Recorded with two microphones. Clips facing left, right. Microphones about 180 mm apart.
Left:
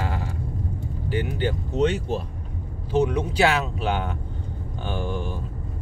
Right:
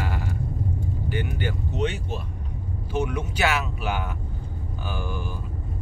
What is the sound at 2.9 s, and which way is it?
Speech, 30° left (ahead or behind).